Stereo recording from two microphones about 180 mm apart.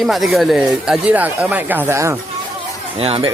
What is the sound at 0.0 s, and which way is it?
Speech, centre (ahead or behind).